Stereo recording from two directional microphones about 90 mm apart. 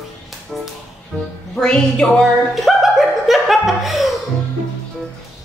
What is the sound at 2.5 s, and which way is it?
Chuckle, centre (ahead or behind).